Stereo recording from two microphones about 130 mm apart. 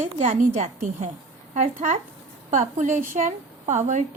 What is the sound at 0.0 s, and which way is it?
A woman's voice, 65° right (ahead or behind).